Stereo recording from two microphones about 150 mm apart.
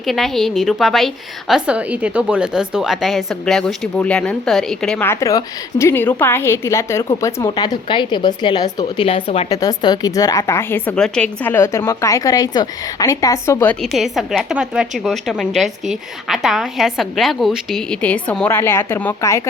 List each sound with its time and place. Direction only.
0.0 s a woman's voice: centre (ahead or behind)
5.0 s a woman's voice: 20° left (ahead or behind)
9.0 s speech: 40° left (ahead or behind)
9.5 s a woman's voice: 25° left (ahead or behind)
13.8 s a woman's voice: centre (ahead or behind); by 19.4 s 15° left (ahead or behind)